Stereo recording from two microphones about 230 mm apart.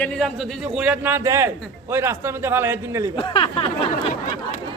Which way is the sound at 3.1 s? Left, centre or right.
Left.